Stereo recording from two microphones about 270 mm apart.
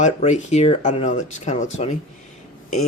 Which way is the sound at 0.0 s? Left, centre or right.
Left.